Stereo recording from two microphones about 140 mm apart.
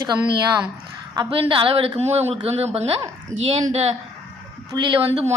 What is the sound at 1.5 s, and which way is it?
A woman's voice, 40° right (ahead or behind).